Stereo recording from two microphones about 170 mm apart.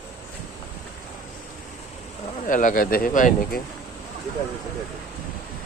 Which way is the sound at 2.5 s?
50° left (ahead or behind).